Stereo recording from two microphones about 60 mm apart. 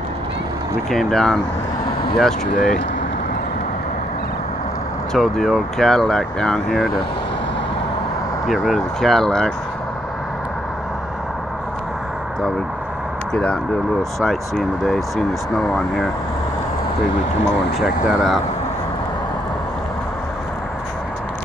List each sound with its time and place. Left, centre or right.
0.8 s speech: centre
5.1 s speech: centre
8.5 s speech: centre
13.3 s speech: centre
14.2 s speech: centre
17.7 s speech: centre